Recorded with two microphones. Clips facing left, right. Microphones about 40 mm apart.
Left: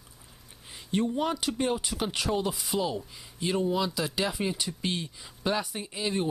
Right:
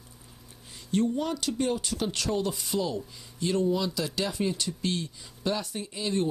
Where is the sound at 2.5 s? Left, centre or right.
Centre.